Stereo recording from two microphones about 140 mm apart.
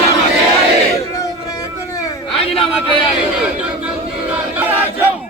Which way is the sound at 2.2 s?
40° left (ahead or behind).